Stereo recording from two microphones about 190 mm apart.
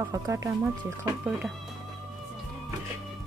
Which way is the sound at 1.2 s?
5° right (ahead or behind).